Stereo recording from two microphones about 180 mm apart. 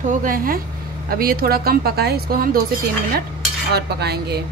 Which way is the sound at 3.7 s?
65° right (ahead or behind).